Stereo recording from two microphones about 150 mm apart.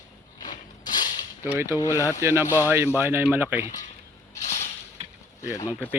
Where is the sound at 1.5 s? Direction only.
15° right (ahead or behind).